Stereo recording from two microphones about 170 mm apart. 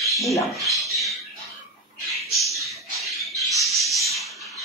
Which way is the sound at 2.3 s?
Centre (ahead or behind).